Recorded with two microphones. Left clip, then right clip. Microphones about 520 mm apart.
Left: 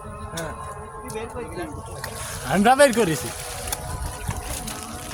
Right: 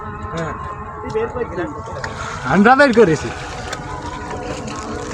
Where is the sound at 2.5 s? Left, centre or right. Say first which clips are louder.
Right 5 dB; left.